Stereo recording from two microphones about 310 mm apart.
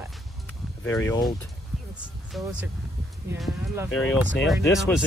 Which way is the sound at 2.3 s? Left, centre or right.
Centre.